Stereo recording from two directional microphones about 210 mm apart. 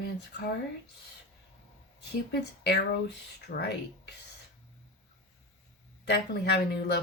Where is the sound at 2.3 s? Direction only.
50° left (ahead or behind).